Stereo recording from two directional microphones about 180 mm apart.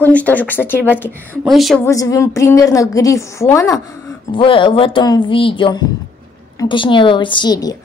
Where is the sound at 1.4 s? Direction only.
Centre (ahead or behind).